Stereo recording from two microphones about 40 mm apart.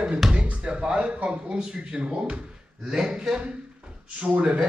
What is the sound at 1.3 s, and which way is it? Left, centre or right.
A man's voice, right.